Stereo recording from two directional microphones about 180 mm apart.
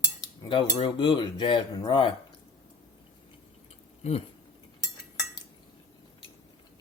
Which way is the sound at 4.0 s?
35° left (ahead or behind).